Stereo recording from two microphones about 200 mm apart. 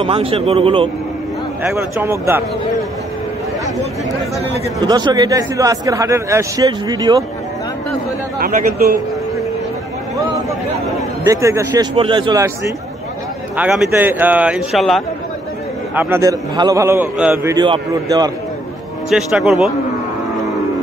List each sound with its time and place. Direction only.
0.0 s speech: 25° right (ahead or behind)
1.6 s speech: 10° right (ahead or behind)
4.7 s speech: 20° right (ahead or behind)
8.4 s a man's voice: 45° right (ahead or behind)
11.2 s speech: 15° right (ahead or behind)
13.6 s speech: 5° right (ahead or behind)
15.9 s speech: 10° right (ahead or behind)
19.0 s speech: 5° right (ahead or behind)